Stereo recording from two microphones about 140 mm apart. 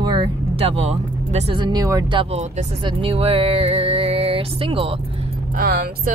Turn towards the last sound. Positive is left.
turn(degrees=-90)